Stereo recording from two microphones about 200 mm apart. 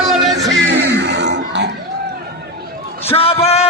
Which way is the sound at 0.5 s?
60° right (ahead or behind).